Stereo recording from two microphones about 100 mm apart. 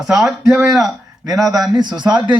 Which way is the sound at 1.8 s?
45° right (ahead or behind).